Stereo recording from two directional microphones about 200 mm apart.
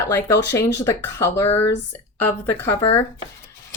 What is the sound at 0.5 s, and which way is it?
Speech, 15° left (ahead or behind).